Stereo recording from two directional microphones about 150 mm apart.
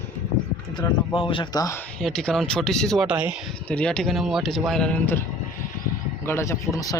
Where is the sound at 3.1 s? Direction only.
10° right (ahead or behind).